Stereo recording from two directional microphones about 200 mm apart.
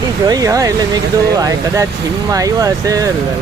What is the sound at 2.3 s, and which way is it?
Speech, 15° right (ahead or behind).